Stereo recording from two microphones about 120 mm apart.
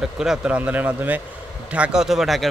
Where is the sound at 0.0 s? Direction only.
5° right (ahead or behind).